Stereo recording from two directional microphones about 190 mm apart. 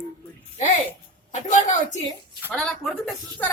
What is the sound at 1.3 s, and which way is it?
Speech, 40° left (ahead or behind).